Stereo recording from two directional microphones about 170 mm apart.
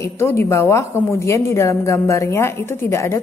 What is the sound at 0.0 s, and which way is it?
A woman's voice, 15° left (ahead or behind).